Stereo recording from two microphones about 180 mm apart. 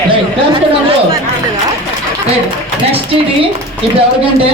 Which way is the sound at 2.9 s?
30° right (ahead or behind).